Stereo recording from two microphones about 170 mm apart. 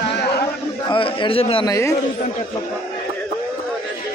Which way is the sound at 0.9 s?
30° left (ahead or behind).